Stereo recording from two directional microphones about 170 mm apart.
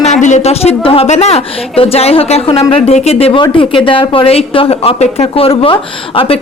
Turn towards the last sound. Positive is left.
turn(degrees=35)  # may be behind; listen again after turning